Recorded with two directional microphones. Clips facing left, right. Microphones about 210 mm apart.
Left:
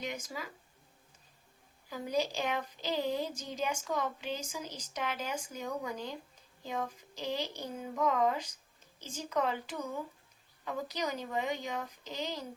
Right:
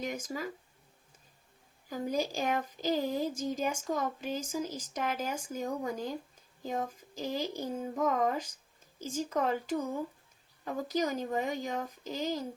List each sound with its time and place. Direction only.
0.0 s a woman's voice: 45° right (ahead or behind)
1.9 s a woman's voice: 45° right (ahead or behind)